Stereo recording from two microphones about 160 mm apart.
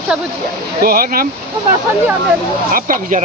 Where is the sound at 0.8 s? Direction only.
65° right (ahead or behind).